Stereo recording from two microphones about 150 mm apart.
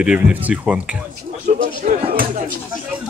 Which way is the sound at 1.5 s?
60° right (ahead or behind).